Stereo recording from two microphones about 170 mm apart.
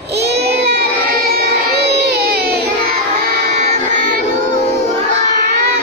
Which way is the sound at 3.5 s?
40° right (ahead or behind).